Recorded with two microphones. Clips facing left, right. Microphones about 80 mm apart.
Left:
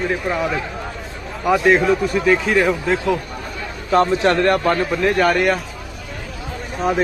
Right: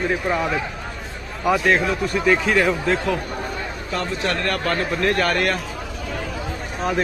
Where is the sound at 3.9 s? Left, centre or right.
Left.